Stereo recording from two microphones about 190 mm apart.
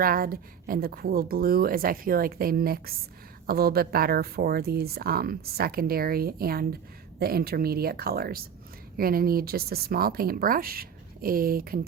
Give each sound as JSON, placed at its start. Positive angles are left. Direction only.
{"t": 0.0, "sound": "speech", "side_deg": -50}